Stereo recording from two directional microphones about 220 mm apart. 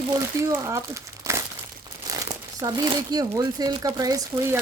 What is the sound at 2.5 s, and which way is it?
Speech, 15° right (ahead or behind).